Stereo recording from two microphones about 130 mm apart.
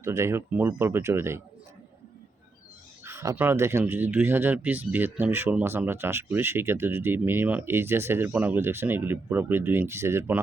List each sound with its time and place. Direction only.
0.0 s speech: 20° right (ahead or behind)
3.0 s speech: 20° right (ahead or behind)